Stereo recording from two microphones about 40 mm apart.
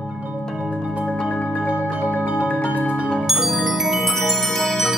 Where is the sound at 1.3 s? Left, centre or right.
Left.